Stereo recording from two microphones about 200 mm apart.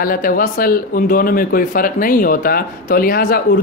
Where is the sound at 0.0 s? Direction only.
45° left (ahead or behind).